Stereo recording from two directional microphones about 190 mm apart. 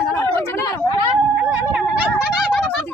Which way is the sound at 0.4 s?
10° left (ahead or behind).